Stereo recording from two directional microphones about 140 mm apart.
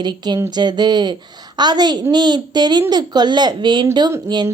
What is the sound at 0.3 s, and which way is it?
A woman's voice, 30° right (ahead or behind).